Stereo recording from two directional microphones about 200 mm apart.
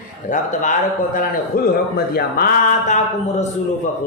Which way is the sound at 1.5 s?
45° left (ahead or behind).